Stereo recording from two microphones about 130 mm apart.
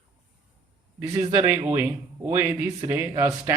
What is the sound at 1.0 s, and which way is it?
A man's voice, 25° right (ahead or behind).